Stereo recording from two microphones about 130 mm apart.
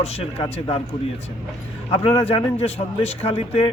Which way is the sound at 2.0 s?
50° left (ahead or behind).